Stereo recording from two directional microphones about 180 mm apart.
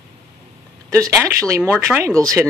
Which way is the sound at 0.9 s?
15° right (ahead or behind).